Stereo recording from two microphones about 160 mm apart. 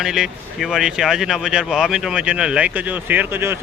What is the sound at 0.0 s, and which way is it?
Speech, 5° right (ahead or behind).